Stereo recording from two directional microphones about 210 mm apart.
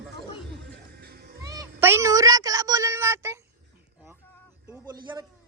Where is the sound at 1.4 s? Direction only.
15° right (ahead or behind).